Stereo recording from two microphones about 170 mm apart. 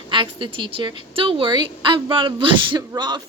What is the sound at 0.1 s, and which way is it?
Speech, 30° right (ahead or behind).